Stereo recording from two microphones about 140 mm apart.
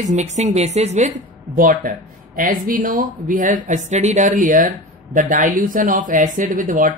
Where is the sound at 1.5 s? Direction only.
85° right.